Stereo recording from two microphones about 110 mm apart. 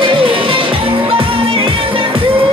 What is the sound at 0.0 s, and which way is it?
Music, 50° right (ahead or behind).